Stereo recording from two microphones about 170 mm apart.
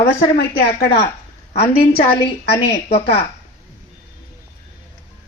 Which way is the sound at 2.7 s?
35° left (ahead or behind).